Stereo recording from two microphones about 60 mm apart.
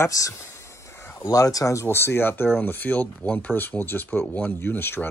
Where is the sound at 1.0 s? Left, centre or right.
Left.